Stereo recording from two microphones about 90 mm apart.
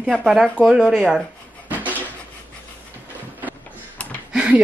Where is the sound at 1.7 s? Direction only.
20° right (ahead or behind).